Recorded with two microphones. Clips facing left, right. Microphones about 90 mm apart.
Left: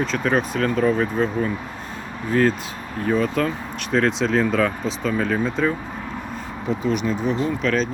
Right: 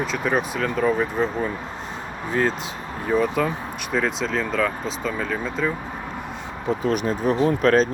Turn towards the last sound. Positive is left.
turn(degrees=-45)  # may be behind; listen again after turning